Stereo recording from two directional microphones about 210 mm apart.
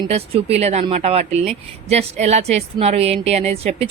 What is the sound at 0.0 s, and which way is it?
Speech, 30° right (ahead or behind).